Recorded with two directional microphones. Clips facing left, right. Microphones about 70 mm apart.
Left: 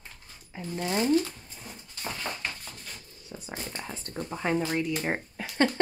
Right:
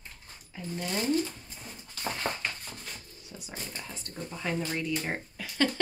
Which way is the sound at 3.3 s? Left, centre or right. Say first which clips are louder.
Left 4 dB; left.